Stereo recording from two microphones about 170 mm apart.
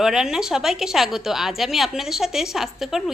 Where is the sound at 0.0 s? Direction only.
5° right (ahead or behind).